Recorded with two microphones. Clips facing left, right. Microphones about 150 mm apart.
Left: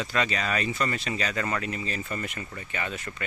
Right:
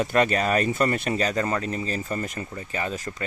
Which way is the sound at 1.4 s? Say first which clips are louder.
Right 4 dB; 30° right (ahead or behind).